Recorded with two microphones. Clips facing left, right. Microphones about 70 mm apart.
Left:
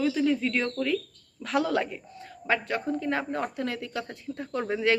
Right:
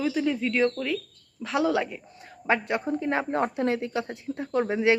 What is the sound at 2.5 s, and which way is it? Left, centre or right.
Speech, right.